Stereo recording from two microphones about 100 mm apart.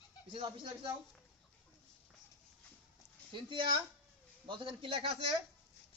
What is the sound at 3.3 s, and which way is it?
Speech, 55° right (ahead or behind).